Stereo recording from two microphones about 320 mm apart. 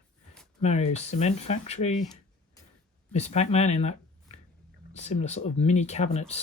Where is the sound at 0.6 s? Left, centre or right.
Left.